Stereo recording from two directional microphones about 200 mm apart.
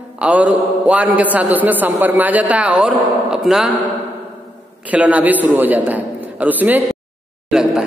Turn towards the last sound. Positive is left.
turn(degrees=-5)  # may be behind; listen again after turning